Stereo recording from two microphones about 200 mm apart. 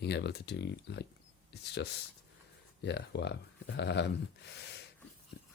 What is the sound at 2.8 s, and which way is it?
Speech, 60° left (ahead or behind).